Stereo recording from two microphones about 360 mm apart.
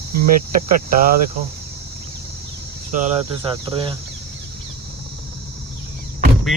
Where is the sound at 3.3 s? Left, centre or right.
Centre.